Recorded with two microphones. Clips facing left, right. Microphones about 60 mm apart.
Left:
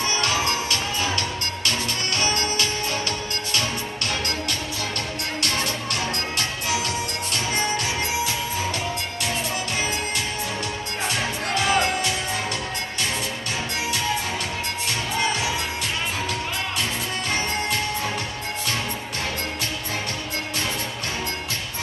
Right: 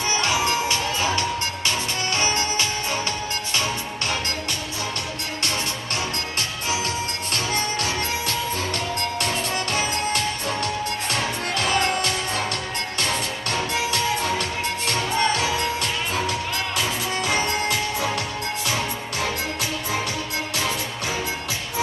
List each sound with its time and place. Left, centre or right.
0.1 s music: right
7.3 s music: left
11.5 s music: centre
17.6 s music: centre